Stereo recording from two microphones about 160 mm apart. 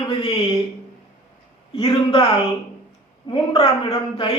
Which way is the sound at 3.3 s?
35° left (ahead or behind).